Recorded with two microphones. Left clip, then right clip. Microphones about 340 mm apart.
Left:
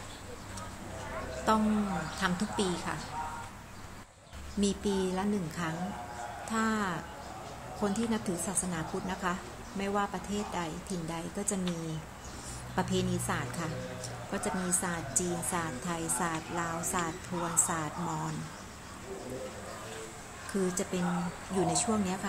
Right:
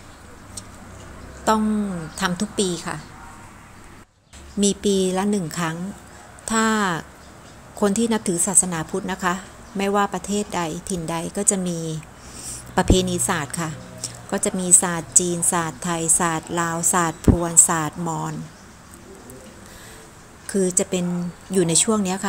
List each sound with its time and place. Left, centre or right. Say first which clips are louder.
1.5 s speech: right 8 dB; centre
4.6 s a woman's voice: right 11 dB; right
20.6 s a woman's voice: right 10 dB; centre